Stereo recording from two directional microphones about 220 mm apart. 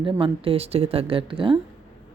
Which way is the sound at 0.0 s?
25° right (ahead or behind).